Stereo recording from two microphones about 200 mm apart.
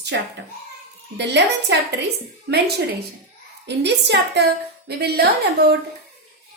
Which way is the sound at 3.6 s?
60° right (ahead or behind).